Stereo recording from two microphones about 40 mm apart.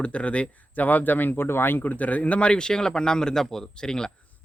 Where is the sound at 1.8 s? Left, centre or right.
Left; by 4.1 s centre.